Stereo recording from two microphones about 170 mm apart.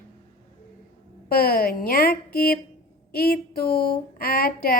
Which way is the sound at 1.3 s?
60° left (ahead or behind).